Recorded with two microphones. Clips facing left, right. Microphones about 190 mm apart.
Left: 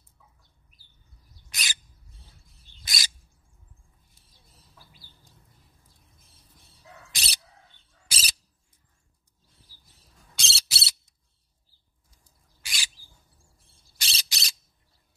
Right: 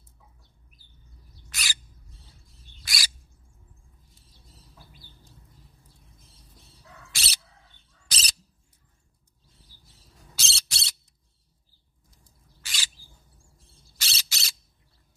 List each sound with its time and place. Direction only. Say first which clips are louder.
1.5 s owl: even; 20° left (ahead or behind)
2.8 s bird: right 1 dB; 20° left (ahead or behind)
7.1 s bird: right 2 dB; 15° left (ahead or behind)
10.3 s a sound: left 1 dB; centre (ahead or behind)
12.6 s rodents: even; 10° left (ahead or behind)
13.9 s a sound: left 1 dB; 15° left (ahead or behind)